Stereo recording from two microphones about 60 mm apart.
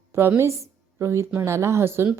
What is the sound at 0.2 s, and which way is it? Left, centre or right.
A woman's voice, right.